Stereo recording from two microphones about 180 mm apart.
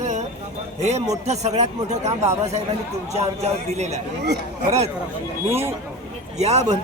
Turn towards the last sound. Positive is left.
turn(degrees=-40)  # may be behind; listen again after turning